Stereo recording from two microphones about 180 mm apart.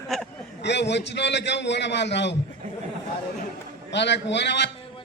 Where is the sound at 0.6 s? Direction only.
70° left (ahead or behind).